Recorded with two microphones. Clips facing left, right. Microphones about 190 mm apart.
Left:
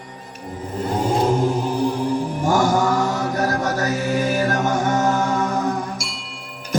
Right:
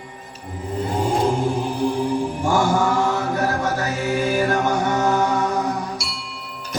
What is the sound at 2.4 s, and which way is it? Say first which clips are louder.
Mantra: left 2 dB; 40° left (ahead or behind).